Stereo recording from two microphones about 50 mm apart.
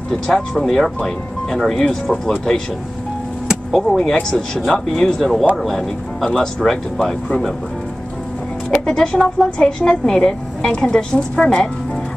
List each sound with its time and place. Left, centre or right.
0.3 s speech: centre
3.7 s speech: centre
8.8 s a woman's voice: centre